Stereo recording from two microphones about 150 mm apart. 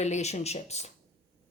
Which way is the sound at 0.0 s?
50° left (ahead or behind).